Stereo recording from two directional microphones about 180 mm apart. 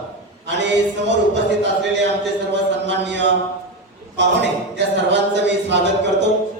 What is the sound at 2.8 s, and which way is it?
Speech, 75° right (ahead or behind).